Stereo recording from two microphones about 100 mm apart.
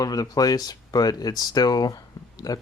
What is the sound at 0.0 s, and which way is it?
Speech, 40° left (ahead or behind).